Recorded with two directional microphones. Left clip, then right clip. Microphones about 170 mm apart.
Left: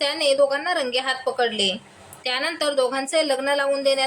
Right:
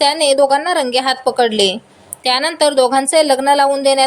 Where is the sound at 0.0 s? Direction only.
30° right (ahead or behind).